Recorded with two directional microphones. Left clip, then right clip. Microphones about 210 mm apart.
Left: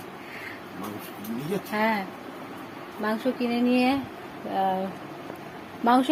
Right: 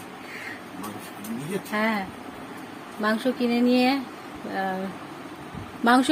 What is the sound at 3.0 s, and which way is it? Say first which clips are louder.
A woman's voice: right 3 dB; 25° right (ahead or behind).